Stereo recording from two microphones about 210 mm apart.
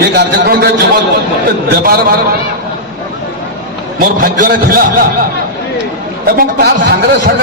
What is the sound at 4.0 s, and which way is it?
Speech, 40° right (ahead or behind).